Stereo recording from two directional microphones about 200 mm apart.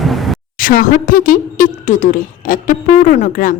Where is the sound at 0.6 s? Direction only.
45° left (ahead or behind).